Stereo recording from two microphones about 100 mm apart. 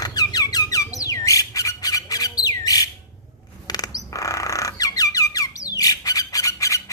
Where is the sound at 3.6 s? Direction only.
40° left (ahead or behind).